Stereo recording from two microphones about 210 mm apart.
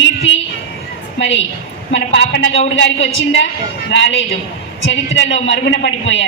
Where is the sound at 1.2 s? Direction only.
60° left (ahead or behind).